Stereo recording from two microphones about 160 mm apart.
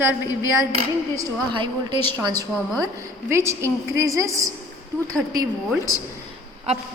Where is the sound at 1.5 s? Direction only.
30° right (ahead or behind).